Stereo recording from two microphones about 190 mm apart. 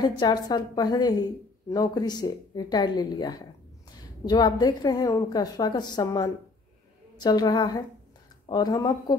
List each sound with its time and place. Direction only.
0.0 s a woman's voice: 25° left (ahead or behind)